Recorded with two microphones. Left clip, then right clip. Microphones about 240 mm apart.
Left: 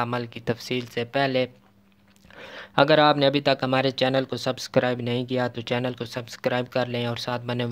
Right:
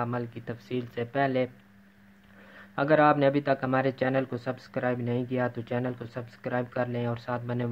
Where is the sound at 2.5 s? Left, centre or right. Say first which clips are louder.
Left 6 dB; left.